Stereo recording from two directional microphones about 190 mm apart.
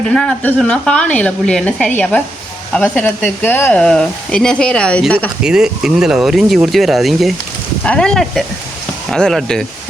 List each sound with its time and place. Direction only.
0.1 s speech: 5° left (ahead or behind)
5.4 s speech: 5° right (ahead or behind)